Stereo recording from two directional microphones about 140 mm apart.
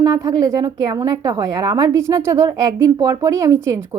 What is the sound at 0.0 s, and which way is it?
A woman's voice, 30° right (ahead or behind).